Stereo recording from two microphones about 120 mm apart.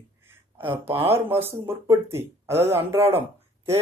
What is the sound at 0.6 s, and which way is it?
Speech, 50° right (ahead or behind).